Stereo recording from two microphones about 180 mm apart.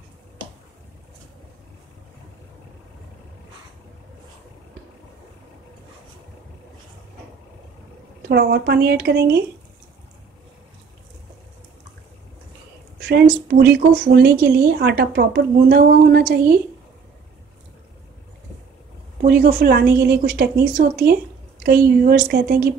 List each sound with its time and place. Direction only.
8.3 s a woman's voice: 65° right (ahead or behind)
13.0 s a woman's voice: 65° right (ahead or behind)
19.2 s a woman's voice: 55° right (ahead or behind)